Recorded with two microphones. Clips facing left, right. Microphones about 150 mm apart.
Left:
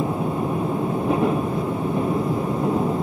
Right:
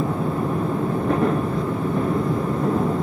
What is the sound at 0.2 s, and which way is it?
Vehicle, 15° left (ahead or behind).